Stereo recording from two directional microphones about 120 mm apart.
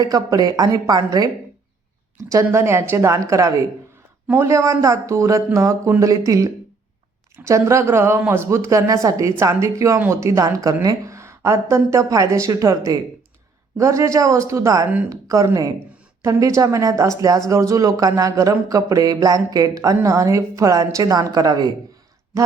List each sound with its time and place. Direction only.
0.0 s a woman's voice: 30° right (ahead or behind)